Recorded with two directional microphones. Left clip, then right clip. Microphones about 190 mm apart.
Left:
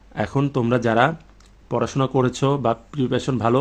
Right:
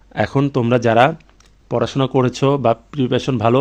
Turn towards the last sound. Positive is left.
turn(degrees=-45)  # may be behind; listen again after turning